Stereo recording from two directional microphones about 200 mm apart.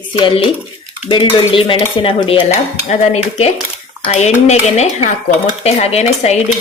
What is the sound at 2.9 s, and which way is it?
Speech, 30° left (ahead or behind).